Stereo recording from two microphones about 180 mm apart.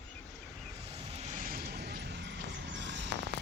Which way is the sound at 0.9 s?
35° right (ahead or behind).